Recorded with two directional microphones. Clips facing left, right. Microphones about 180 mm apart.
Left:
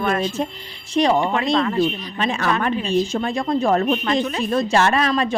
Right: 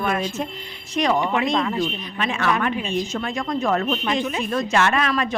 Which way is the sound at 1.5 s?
10° right (ahead or behind).